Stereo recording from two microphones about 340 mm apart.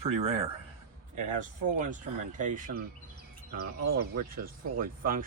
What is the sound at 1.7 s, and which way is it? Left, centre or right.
Speech, right.